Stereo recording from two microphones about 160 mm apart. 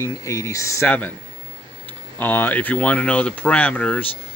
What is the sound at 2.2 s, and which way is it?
Speech, 10° left (ahead or behind).